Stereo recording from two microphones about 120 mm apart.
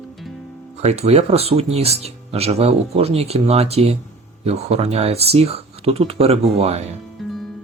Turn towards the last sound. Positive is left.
turn(degrees=0)  # may be behind; listen again after turning